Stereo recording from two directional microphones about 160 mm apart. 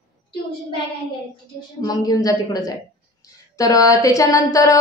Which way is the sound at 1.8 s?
25° left (ahead or behind).